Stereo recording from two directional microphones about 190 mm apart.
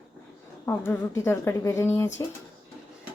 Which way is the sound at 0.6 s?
15° left (ahead or behind).